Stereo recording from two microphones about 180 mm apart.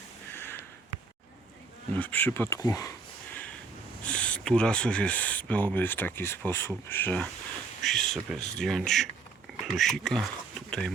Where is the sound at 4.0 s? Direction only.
5° left (ahead or behind).